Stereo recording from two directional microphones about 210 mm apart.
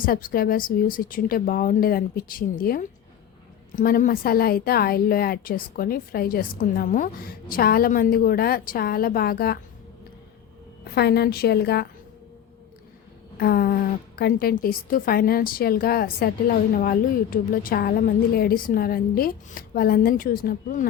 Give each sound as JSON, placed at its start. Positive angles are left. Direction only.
{"t": 0.0, "sound": "a woman's voice", "side_deg": 40}
{"t": 10.9, "sound": "a woman's voice", "side_deg": 50}
{"t": 13.3, "sound": "a woman's voice", "side_deg": 45}